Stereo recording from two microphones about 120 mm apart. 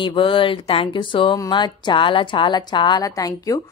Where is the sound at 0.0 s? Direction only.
45° left (ahead or behind).